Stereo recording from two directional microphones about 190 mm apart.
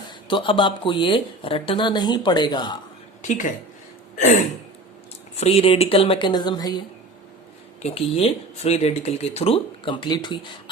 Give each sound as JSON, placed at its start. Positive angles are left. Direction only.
{"t": 0.1, "sound": "speech", "side_deg": 25}
{"t": 3.2, "sound": "a woman's voice", "side_deg": 40}
{"t": 5.4, "sound": "speech", "side_deg": 30}
{"t": 7.8, "sound": "speech", "side_deg": 35}